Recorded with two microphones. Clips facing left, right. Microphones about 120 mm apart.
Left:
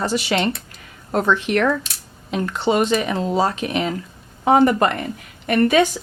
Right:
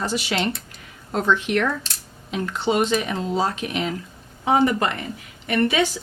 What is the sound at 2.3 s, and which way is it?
A woman's voice, 60° left (ahead or behind).